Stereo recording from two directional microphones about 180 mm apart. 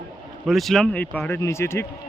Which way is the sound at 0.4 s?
Centre (ahead or behind).